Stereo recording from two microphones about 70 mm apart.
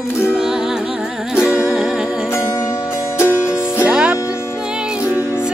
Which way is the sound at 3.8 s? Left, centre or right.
Centre.